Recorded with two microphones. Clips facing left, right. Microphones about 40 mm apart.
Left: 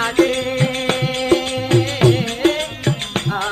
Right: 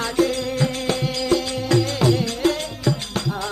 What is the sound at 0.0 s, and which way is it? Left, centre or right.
Music, left.